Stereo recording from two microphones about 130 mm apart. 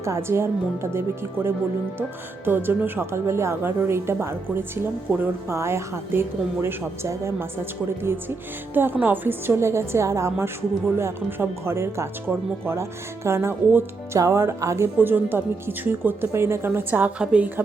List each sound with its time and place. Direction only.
0.0 s speech: 20° right (ahead or behind)